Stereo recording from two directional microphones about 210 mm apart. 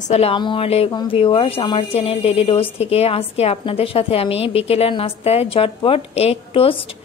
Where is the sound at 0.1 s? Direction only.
25° left (ahead or behind).